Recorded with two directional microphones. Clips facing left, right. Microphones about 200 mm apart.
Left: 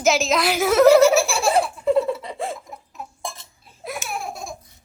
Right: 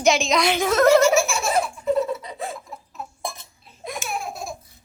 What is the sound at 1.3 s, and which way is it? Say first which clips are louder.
Laughter: left 3 dB; 30° left (ahead or behind).